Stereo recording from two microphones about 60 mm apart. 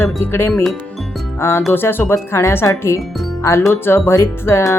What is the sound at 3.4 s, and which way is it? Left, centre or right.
Speech, left.